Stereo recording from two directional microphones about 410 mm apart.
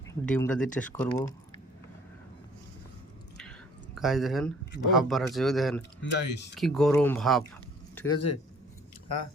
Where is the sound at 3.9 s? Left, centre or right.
Centre.